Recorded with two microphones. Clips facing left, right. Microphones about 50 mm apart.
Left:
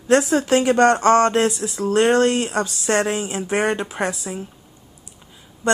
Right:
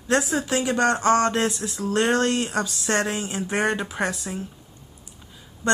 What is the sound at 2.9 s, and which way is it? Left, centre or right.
A woman's voice, centre.